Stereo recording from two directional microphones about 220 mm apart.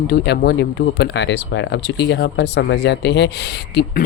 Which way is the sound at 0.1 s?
45° left (ahead or behind).